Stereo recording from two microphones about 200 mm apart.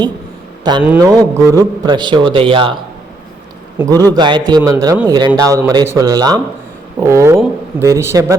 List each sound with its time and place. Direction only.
0.6 s a man's voice: 20° right (ahead or behind)
3.8 s a man's voice: 20° right (ahead or behind)